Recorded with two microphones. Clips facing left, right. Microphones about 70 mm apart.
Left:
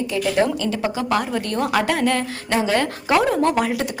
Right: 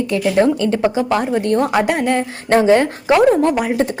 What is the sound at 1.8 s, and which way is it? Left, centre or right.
A woman's voice, centre.